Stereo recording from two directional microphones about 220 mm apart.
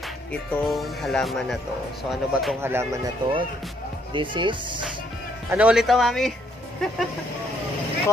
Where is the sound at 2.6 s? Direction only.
10° right (ahead or behind).